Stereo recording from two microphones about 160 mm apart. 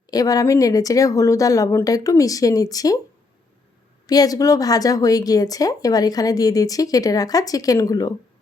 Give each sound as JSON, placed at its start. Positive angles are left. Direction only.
{"t": 0.1, "sound": "a woman's voice", "side_deg": 25}
{"t": 4.0, "sound": "a woman's voice", "side_deg": 25}